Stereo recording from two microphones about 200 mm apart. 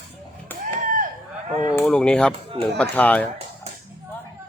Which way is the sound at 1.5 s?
20° left (ahead or behind).